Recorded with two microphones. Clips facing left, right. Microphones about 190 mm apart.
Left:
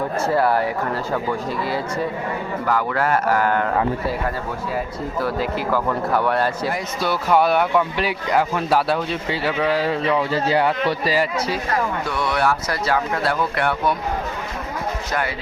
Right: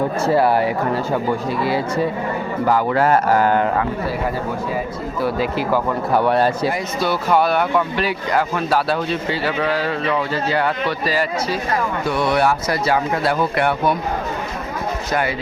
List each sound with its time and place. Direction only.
0.3 s speech: 25° right (ahead or behind)
2.6 s speech: 30° right (ahead or behind)
5.7 s speech: 25° right (ahead or behind)
7.5 s speech: 5° left (ahead or behind)
9.8 s speech: 20° left (ahead or behind)
12.1 s speech: 15° right (ahead or behind)